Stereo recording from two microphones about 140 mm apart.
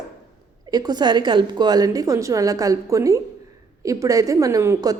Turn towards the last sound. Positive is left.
turn(degrees=-25)  # may be behind; listen again after turning